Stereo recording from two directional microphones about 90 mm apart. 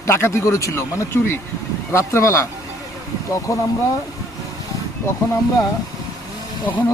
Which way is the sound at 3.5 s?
40° left (ahead or behind).